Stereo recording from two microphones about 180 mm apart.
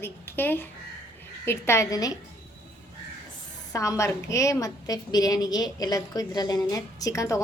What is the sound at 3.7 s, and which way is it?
A woman's voice, 15° left (ahead or behind).